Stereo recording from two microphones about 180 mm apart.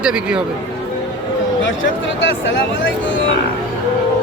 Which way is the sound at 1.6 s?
90° left.